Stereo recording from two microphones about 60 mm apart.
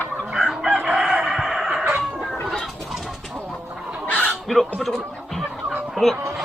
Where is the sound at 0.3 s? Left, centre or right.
Centre.